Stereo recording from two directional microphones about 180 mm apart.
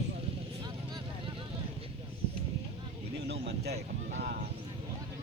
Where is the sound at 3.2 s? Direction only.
75° right (ahead or behind).